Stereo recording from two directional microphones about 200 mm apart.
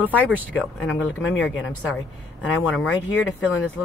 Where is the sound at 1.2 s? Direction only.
75° left (ahead or behind).